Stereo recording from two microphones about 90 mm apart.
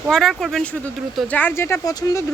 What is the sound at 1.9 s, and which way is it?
Speech, 45° left (ahead or behind).